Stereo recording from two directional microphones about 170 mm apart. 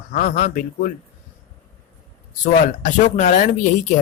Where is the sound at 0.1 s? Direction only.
55° left (ahead or behind).